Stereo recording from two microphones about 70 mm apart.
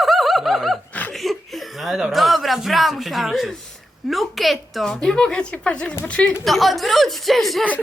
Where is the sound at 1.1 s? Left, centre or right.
Centre.